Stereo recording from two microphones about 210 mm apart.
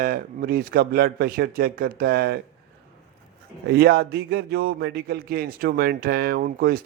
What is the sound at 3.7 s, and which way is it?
A man's voice, 50° right (ahead or behind).